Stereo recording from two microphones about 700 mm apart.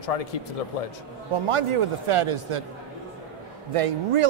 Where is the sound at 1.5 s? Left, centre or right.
Right.